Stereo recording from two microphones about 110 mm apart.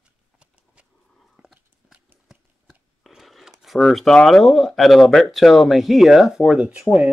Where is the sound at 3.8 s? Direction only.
5° left (ahead or behind).